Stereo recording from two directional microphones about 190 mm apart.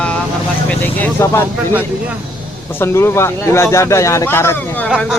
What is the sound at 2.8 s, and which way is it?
Speech, 15° left (ahead or behind).